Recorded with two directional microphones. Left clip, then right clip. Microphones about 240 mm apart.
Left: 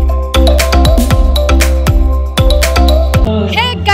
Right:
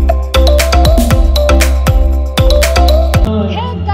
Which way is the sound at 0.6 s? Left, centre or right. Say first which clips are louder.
Right 1 dB; centre.